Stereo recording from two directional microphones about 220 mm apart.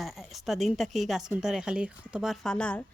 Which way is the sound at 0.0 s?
Centre (ahead or behind).